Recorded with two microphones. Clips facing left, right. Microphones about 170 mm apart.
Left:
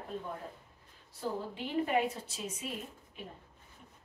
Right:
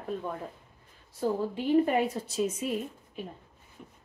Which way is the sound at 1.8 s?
40° right (ahead or behind).